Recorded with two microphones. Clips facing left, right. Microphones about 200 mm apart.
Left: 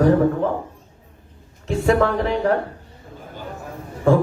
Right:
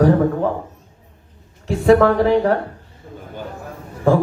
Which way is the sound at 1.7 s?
35° right (ahead or behind).